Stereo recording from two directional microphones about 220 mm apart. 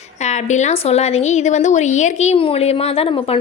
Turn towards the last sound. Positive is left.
turn(degrees=25)  # may be behind; listen again after turning